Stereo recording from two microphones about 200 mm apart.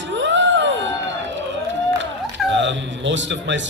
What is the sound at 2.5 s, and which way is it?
A woman's voice, 65° right (ahead or behind).